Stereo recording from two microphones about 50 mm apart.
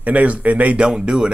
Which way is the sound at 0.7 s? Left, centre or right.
Centre.